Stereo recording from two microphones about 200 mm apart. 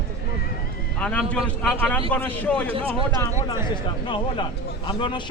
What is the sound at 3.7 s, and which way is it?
Speech, 25° left (ahead or behind).